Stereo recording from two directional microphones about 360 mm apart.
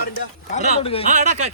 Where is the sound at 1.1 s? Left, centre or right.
Centre.